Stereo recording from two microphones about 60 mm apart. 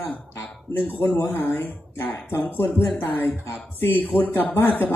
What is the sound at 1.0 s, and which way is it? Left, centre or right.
Speech, left.